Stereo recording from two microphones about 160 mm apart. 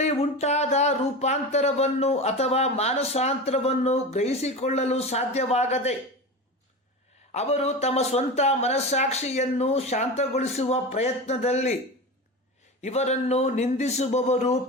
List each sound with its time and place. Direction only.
0.0 s speech: 40° left (ahead or behind)
7.3 s speech: 40° left (ahead or behind)
12.8 s speech: 45° left (ahead or behind)